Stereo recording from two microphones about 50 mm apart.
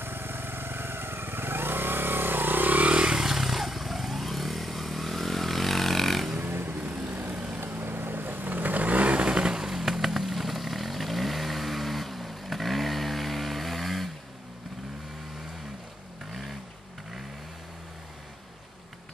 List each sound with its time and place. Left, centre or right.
0.0 s motorcycle: right
2.9 s motorcycle: centre
3.3 s vehicle: centre
6.4 s vehicle: right
8.7 s vehicle: right; by 14.0 s centre